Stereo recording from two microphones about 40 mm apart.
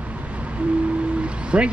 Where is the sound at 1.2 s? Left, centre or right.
Right.